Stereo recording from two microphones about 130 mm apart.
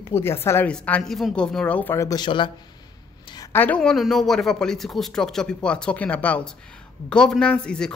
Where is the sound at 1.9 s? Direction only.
30° left (ahead or behind).